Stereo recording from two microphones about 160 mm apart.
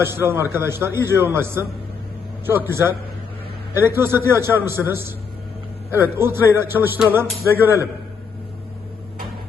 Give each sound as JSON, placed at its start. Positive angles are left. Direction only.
{"t": 0.0, "sound": "a man's voice", "side_deg": -15}